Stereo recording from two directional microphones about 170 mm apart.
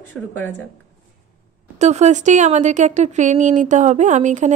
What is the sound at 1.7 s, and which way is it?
A woman's voice, 40° right (ahead or behind).